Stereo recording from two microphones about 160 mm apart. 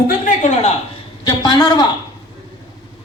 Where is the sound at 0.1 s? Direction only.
50° left (ahead or behind).